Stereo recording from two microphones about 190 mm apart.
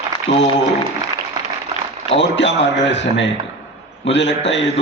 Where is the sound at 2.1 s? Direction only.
70° left (ahead or behind).